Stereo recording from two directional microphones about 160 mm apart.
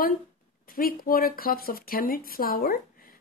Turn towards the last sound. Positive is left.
turn(degrees=65)  # may be behind; listen again after turning